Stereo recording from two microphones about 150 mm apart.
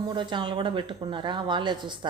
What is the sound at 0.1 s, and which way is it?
Speech, 30° right (ahead or behind).